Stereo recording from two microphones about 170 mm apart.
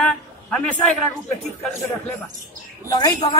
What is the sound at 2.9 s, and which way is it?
Speech, 25° left (ahead or behind).